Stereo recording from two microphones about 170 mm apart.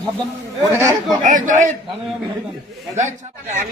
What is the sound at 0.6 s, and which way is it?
Speech, 15° right (ahead or behind).